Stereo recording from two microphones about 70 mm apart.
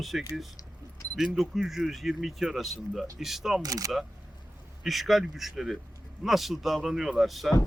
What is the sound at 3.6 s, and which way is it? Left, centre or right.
Speech, right.